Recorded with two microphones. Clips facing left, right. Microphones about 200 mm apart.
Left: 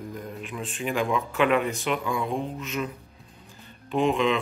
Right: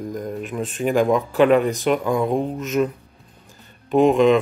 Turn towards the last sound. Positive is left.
turn(degrees=-45)  # may be behind; listen again after turning